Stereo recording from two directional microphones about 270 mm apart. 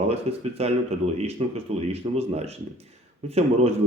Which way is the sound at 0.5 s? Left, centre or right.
Right.